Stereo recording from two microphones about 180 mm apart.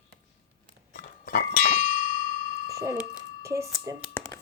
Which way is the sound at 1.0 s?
60° left (ahead or behind).